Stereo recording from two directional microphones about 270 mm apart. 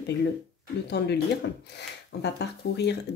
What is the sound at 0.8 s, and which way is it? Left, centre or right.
Speech, left.